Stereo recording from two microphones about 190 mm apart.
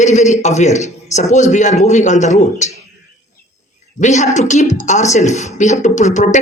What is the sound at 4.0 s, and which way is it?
A man's voice, 40° left (ahead or behind).